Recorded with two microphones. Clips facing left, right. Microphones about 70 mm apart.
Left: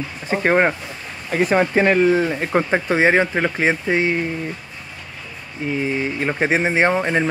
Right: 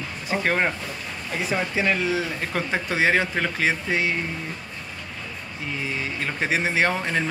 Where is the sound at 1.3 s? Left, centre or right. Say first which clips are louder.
Left 9 dB; left.